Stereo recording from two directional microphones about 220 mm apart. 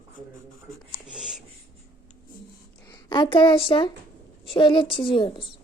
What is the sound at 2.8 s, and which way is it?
A woman's voice, 20° left (ahead or behind).